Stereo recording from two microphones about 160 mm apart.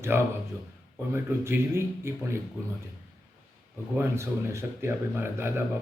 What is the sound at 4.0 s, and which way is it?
Speech, 15° right (ahead or behind).